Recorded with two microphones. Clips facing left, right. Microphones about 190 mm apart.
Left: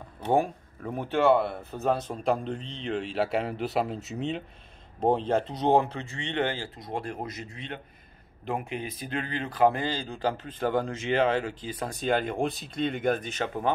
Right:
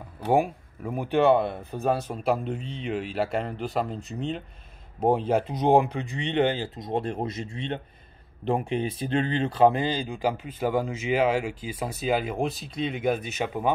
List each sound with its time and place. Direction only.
0.3 s speech: 10° right (ahead or behind)